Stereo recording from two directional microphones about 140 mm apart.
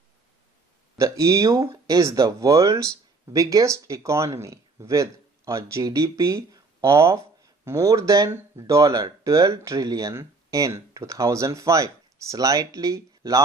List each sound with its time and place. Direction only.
0.9 s speech: 20° right (ahead or behind)